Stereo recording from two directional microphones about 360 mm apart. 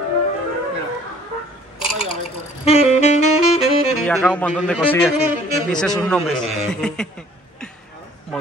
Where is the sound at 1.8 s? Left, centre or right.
Centre.